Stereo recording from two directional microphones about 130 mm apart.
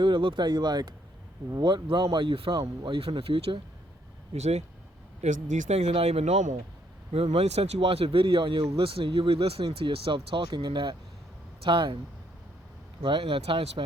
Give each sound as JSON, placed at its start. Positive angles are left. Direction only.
{"t": 0.0, "sound": "speech", "side_deg": -40}
{"t": 4.4, "sound": "speech", "side_deg": -55}
{"t": 5.2, "sound": "speech", "side_deg": -70}
{"t": 7.3, "sound": "speech", "side_deg": -50}
{"t": 13.0, "sound": "speech", "side_deg": -40}